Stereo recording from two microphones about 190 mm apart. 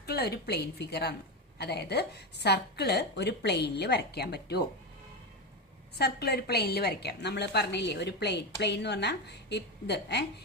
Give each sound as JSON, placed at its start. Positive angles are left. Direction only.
{"t": 0.0, "sound": "a woman's voice", "side_deg": 55}
{"t": 6.0, "sound": "a woman's voice", "side_deg": 55}